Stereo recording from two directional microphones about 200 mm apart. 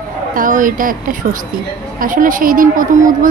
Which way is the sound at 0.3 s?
40° right (ahead or behind).